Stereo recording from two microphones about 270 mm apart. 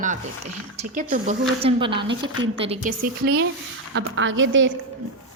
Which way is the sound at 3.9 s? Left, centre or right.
Right.